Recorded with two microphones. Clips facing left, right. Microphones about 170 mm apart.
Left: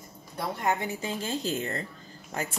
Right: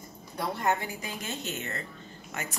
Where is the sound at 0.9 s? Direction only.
30° left (ahead or behind).